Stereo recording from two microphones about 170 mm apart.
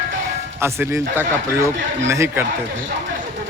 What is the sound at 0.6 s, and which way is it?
A man's voice, 15° right (ahead or behind).